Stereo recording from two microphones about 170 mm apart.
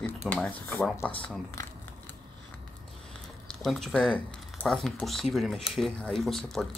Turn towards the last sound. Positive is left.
turn(degrees=0)  # may be behind; listen again after turning